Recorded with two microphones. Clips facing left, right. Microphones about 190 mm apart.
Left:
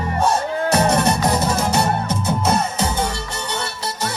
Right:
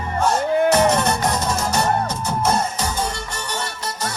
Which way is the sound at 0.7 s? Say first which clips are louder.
Even; 10° left (ahead or behind).